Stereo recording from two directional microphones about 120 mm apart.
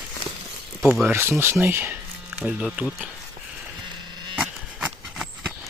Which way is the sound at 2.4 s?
Centre (ahead or behind).